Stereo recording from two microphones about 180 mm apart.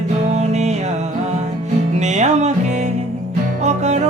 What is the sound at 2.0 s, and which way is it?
Music, 40° right (ahead or behind).